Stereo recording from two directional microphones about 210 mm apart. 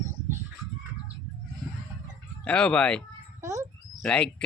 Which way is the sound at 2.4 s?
5° left (ahead or behind).